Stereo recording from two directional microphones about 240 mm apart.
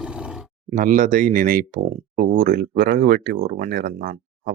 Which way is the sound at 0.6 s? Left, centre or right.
Right.